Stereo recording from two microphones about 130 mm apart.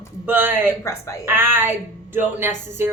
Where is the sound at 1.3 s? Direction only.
15° right (ahead or behind).